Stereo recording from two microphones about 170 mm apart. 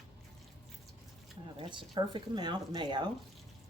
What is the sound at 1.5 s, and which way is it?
Speech, 30° right (ahead or behind).